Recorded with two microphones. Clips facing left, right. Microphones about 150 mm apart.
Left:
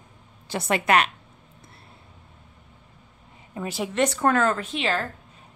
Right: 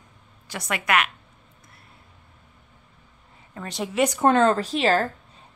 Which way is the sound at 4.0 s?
15° right (ahead or behind).